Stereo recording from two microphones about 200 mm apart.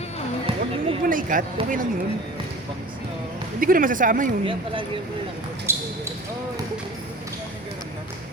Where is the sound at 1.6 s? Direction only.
25° right (ahead or behind).